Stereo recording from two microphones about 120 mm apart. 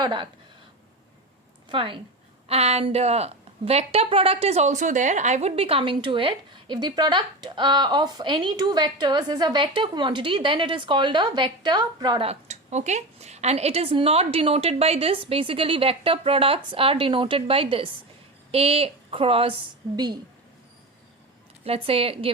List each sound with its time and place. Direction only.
0.0 s speech: 40° right (ahead or behind)
1.7 s a woman's voice: 45° right (ahead or behind)
2.5 s speech: 60° right (ahead or behind); by 12.2 s 35° right (ahead or behind)
12.2 s a woman's voice: 65° right (ahead or behind)
21.6 s a woman's voice: 55° right (ahead or behind)